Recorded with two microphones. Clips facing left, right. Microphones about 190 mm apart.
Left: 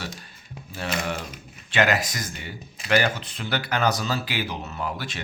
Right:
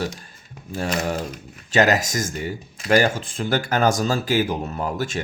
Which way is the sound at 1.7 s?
40° right (ahead or behind).